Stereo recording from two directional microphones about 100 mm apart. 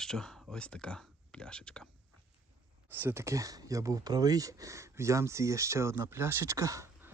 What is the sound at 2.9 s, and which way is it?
Speech, 20° right (ahead or behind).